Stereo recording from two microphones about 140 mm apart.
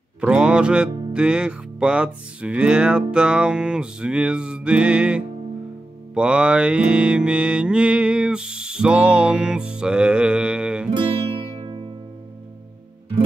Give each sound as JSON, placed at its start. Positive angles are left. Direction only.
{"t": 0.2, "sound": "music", "side_deg": -10}
{"t": 1.1, "sound": "mantra", "side_deg": -5}
{"t": 10.9, "sound": "music", "side_deg": -35}